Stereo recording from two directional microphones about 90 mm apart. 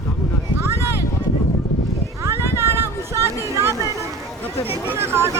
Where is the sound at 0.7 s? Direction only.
25° right (ahead or behind).